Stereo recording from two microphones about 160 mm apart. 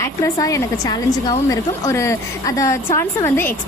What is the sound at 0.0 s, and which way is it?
A woman's voice, 20° left (ahead or behind).